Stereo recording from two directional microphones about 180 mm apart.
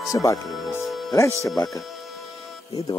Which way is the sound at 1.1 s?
15° left (ahead or behind).